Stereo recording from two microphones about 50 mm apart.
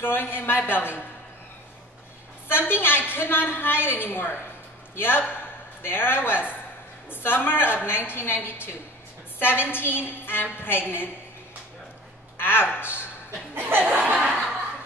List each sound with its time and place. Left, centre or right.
0.0 s a woman's voice: left
2.4 s a woman's voice: left
12.4 s a woman's voice: left
13.7 s speech: right